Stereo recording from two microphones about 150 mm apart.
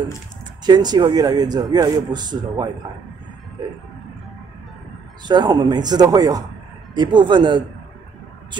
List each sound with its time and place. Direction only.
0.7 s speech: 30° right (ahead or behind)
5.2 s speech: 30° right (ahead or behind)